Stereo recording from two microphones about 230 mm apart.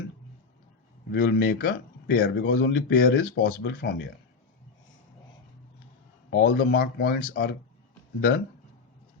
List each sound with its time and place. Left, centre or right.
1.1 s speech: left
6.3 s speech: left